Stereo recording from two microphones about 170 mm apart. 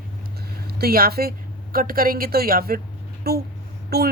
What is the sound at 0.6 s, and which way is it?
A woman's voice, 65° right (ahead or behind).